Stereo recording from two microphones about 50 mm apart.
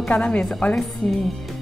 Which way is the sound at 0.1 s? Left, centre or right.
Left.